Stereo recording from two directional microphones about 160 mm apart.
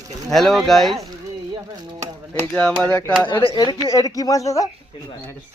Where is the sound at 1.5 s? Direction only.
25° right (ahead or behind).